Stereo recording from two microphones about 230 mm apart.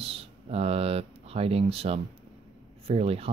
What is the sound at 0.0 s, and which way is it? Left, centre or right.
Speech, right.